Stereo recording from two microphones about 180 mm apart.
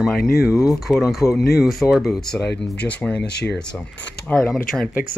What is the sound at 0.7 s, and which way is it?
Speech, centre (ahead or behind).